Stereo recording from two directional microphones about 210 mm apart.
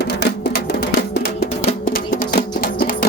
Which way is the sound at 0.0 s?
50° left (ahead or behind).